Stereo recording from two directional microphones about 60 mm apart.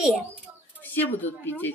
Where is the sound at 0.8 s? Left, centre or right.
Left.